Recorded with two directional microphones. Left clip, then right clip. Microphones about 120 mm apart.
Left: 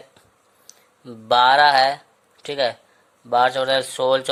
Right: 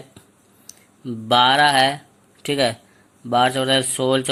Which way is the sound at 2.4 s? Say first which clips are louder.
Right 2 dB; centre (ahead or behind).